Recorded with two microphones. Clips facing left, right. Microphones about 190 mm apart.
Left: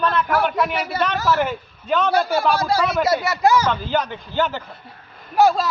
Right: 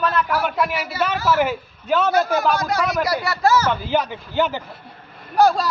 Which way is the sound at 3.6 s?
10° right (ahead or behind).